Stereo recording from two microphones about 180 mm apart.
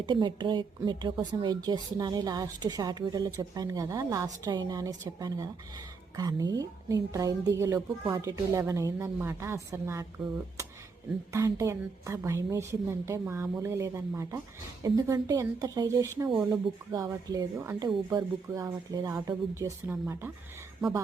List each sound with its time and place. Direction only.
0.0 s a woman's voice: 25° right (ahead or behind)
11.3 s a woman's voice: 15° right (ahead or behind)